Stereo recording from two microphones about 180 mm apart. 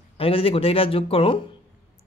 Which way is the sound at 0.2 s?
30° left (ahead or behind).